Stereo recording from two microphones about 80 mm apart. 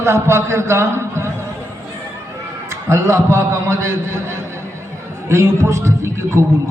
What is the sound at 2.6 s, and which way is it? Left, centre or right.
A man's voice, right.